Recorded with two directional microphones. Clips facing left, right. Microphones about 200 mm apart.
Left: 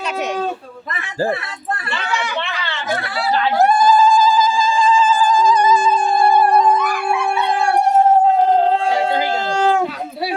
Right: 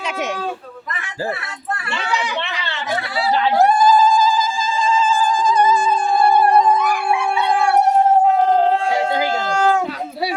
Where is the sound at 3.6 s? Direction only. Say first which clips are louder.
Left 1 dB; 35° right (ahead or behind).